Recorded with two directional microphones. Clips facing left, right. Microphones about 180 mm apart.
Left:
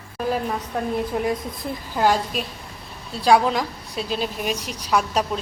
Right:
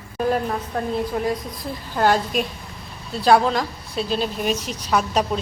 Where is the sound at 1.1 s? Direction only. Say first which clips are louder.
Even; 20° left (ahead or behind).